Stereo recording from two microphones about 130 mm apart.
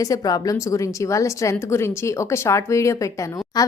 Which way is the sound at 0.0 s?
30° left (ahead or behind).